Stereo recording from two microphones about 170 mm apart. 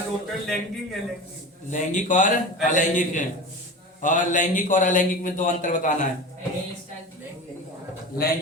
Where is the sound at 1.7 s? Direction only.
45° left (ahead or behind).